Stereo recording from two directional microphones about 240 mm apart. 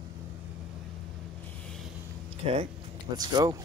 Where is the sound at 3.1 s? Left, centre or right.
Centre.